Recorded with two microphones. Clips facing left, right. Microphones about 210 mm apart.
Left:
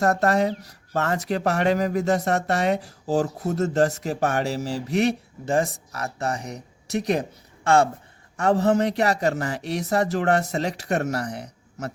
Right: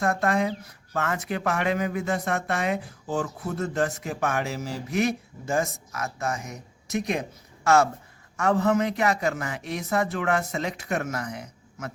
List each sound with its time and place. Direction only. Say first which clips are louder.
0.0 s speech: left 4 dB; 40° left (ahead or behind)